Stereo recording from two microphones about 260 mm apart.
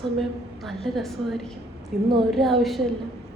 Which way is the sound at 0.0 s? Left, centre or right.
Centre.